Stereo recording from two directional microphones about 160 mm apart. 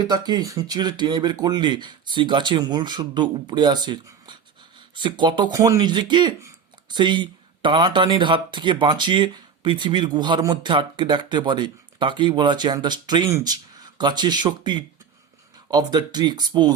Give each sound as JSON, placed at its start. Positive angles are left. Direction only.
{"t": 0.0, "sound": "speech", "side_deg": -25}